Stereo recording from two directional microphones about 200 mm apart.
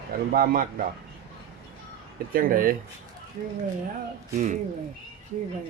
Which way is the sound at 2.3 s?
45° right (ahead or behind).